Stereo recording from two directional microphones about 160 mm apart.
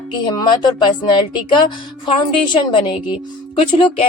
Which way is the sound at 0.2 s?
25° left (ahead or behind).